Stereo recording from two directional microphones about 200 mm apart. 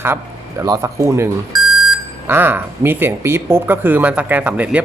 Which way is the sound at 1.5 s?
90° right.